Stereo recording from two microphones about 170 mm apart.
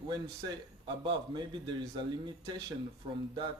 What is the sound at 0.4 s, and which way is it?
A man's voice, 30° right (ahead or behind).